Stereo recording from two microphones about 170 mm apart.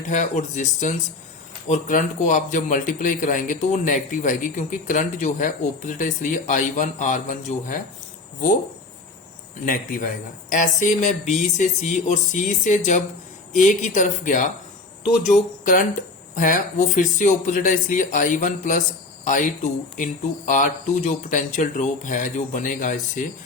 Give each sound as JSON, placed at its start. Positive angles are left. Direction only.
{"t": 0.1, "sound": "a man's voice", "side_deg": 45}
{"t": 9.6, "sound": "a man's voice", "side_deg": 55}